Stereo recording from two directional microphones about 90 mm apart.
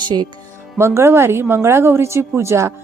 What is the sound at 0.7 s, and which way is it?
Speech, 30° right (ahead or behind).